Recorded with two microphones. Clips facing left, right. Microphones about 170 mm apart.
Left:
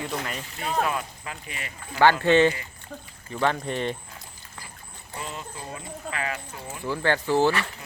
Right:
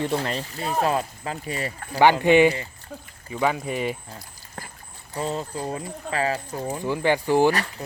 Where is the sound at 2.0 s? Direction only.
15° right (ahead or behind).